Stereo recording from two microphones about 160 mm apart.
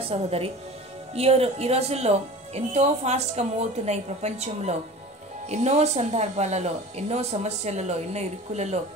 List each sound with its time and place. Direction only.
0.0 s a woman's voice: 40° right (ahead or behind)